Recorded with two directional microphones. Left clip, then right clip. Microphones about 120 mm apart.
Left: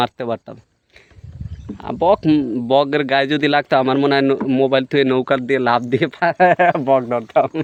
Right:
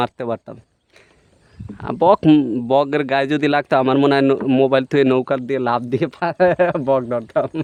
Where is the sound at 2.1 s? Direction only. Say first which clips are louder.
Right 3 dB; 35° right (ahead or behind).